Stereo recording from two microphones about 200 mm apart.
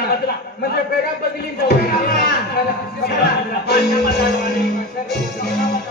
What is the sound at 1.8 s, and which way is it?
Speech, 50° left (ahead or behind).